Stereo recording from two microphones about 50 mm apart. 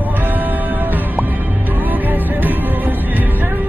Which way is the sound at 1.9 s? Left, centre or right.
Right.